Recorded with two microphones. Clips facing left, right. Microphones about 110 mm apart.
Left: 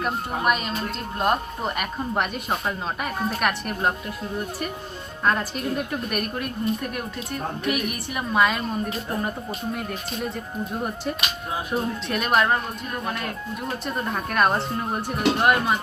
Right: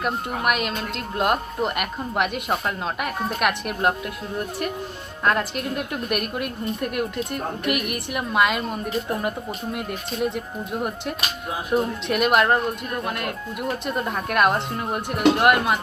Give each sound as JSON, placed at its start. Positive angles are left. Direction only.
{"t": 0.0, "sound": "speech", "side_deg": -5}
{"t": 5.2, "sound": "speech", "side_deg": 0}
{"t": 7.8, "sound": "a woman's voice", "side_deg": -65}
{"t": 8.1, "sound": "speech", "side_deg": -5}